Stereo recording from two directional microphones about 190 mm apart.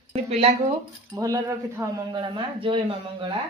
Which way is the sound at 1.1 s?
15° right (ahead or behind).